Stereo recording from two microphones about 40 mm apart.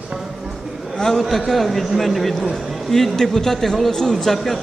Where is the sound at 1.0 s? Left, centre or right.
Centre.